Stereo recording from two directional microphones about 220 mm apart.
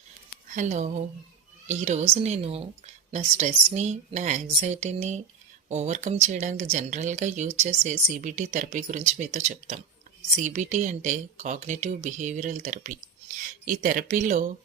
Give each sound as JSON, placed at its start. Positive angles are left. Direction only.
{"t": 0.4, "sound": "speech", "side_deg": -35}